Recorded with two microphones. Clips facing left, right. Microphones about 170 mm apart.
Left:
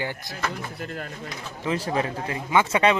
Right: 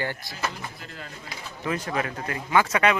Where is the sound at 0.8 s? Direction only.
55° left (ahead or behind).